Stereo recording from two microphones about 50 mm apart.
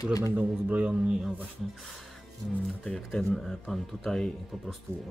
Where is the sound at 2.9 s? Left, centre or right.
Centre.